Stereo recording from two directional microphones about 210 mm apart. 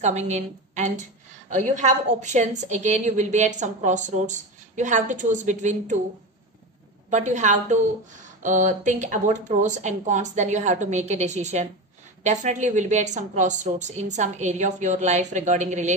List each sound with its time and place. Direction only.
0.0 s a woman's voice: 30° right (ahead or behind)
7.1 s a woman's voice: 35° right (ahead or behind)